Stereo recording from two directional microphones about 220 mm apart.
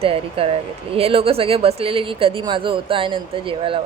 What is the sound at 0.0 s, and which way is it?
Speech, 25° right (ahead or behind).